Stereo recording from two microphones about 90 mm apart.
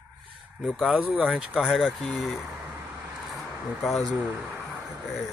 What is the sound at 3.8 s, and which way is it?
Speech, centre (ahead or behind).